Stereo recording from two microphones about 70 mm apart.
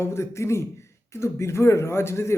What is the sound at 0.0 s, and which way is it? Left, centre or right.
Speech, left.